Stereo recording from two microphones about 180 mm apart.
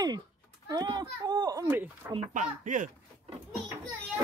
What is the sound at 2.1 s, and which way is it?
Speech, 40° right (ahead or behind).